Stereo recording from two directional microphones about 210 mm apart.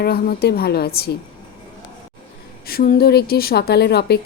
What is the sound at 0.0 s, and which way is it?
Speech, 45° left (ahead or behind).